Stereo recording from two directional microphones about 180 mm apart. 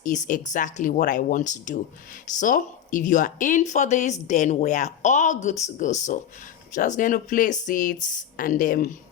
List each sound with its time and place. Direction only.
0.0 s speech: 45° left (ahead or behind)